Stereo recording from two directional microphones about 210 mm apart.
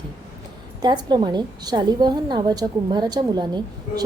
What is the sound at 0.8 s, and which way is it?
A woman's voice, 20° right (ahead or behind).